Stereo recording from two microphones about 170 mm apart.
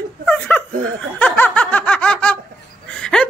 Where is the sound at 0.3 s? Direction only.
10° left (ahead or behind).